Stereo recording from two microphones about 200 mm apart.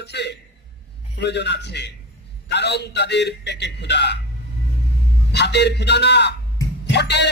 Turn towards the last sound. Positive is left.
turn(degrees=60)  # may be behind; listen again after turning